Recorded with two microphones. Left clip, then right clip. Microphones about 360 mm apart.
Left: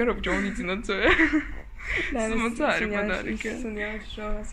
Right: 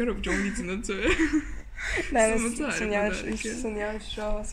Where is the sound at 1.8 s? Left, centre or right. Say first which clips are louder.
Right 1 dB; right.